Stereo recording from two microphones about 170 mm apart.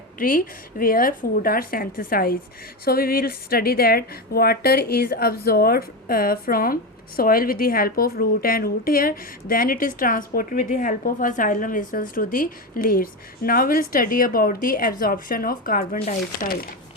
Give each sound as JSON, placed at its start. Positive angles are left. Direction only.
{"t": 0.2, "sound": "a woman's voice", "side_deg": 55}